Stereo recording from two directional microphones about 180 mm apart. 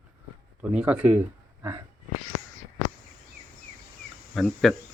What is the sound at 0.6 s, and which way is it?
Speech, 5° right (ahead or behind).